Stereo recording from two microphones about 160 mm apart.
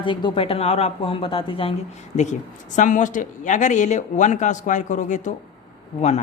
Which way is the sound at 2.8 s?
55° left (ahead or behind).